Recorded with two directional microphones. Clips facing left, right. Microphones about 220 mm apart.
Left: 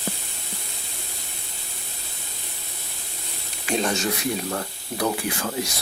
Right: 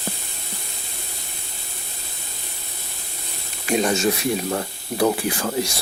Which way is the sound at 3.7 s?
10° right (ahead or behind).